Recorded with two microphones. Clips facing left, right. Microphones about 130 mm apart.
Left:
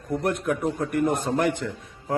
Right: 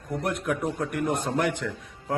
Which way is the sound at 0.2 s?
Centre (ahead or behind).